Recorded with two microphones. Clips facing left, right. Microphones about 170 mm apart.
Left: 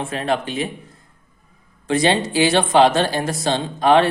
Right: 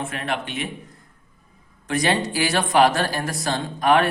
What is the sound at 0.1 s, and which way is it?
Speech, 30° left (ahead or behind).